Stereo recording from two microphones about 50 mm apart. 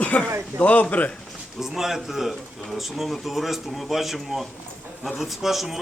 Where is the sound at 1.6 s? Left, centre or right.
Centre.